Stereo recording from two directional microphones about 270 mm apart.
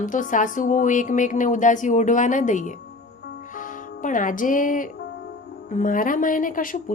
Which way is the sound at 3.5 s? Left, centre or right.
Left.